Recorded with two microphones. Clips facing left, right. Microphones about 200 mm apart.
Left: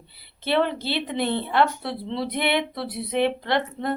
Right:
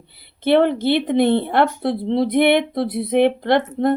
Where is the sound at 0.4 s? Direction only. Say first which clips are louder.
Right 8 dB; 55° right (ahead or behind).